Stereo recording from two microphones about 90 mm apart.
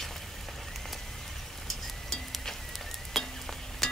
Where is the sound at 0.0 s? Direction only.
Centre (ahead or behind).